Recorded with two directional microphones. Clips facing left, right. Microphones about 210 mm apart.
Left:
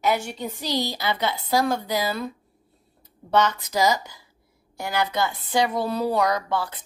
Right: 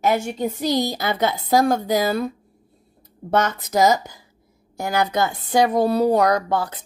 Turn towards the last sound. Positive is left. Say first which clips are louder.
# right 4 dB
turn(degrees=-45)  # may be behind; listen again after turning